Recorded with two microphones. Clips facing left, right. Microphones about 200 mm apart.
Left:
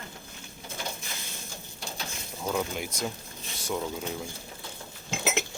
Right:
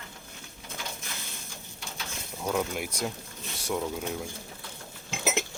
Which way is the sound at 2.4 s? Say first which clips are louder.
Right 1 dB; centre (ahead or behind).